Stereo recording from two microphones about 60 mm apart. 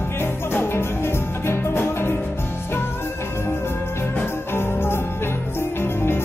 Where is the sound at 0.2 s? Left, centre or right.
Left.